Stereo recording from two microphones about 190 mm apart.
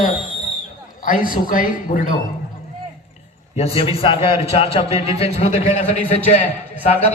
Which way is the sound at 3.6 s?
30° left (ahead or behind).